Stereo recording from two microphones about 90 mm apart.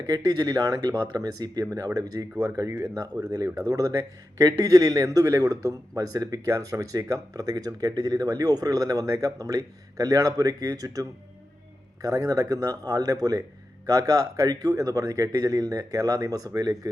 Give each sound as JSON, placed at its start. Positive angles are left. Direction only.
{"t": 0.3, "sound": "speech", "side_deg": -50}
{"t": 1.7, "sound": "speech", "side_deg": -35}
{"t": 12.0, "sound": "speech", "side_deg": -40}